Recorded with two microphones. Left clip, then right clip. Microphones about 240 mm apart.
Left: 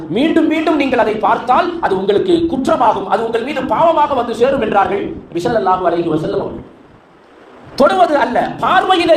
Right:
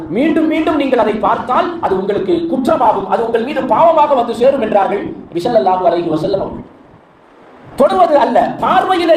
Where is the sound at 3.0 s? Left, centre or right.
Left.